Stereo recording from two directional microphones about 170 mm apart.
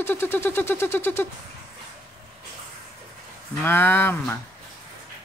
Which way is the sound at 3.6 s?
10° left (ahead or behind).